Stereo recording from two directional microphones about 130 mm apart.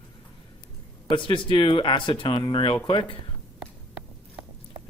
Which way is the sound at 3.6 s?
10° right (ahead or behind).